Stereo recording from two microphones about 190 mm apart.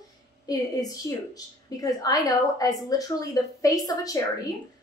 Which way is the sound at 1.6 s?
20° left (ahead or behind).